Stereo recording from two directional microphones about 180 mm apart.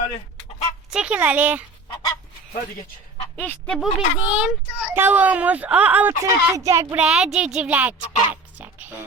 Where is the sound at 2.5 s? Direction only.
40° left (ahead or behind).